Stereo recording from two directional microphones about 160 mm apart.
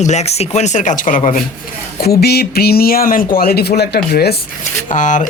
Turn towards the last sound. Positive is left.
turn(degrees=50)  # may be behind; listen again after turning